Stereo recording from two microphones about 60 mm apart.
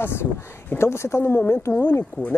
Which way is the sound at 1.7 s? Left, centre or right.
Left.